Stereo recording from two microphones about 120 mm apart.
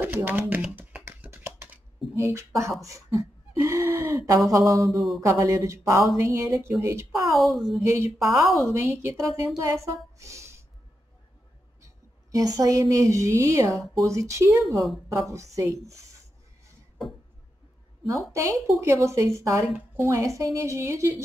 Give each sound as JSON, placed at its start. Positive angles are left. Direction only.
{"t": 0.0, "sound": "speech", "side_deg": -15}
{"t": 1.0, "sound": "a sound", "side_deg": -20}
{"t": 3.6, "sound": "gasp", "side_deg": -25}
{"t": 4.3, "sound": "a woman's voice", "side_deg": -25}
{"t": 7.2, "sound": "a woman's voice", "side_deg": 0}
{"t": 7.9, "sound": "a woman's voice", "side_deg": -20}
{"t": 8.3, "sound": "a woman's voice", "side_deg": 0}
{"t": 8.7, "sound": "a woman's voice", "side_deg": -20}
{"t": 12.3, "sound": "a woman's voice", "side_deg": -30}
{"t": 14.8, "sound": "a woman's voice", "side_deg": 0}
{"t": 15.3, "sound": "a woman's voice", "side_deg": -25}
{"t": 18.3, "sound": "a woman's voice", "side_deg": -25}